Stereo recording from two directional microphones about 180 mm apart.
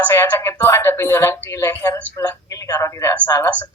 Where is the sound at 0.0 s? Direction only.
10° left (ahead or behind).